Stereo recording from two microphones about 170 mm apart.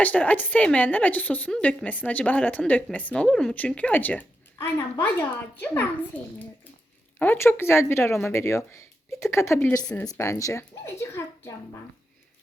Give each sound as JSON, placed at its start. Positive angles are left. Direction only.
{"t": 0.0, "sound": "a woman's voice", "side_deg": 10}
{"t": 7.2, "sound": "a woman's voice", "side_deg": 10}
{"t": 9.8, "sound": "speech", "side_deg": 5}
{"t": 10.1, "sound": "a woman's voice", "side_deg": 20}